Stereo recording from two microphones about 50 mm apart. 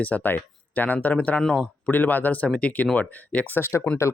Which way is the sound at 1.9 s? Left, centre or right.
Left.